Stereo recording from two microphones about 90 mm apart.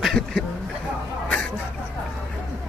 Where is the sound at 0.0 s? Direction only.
5° left (ahead or behind).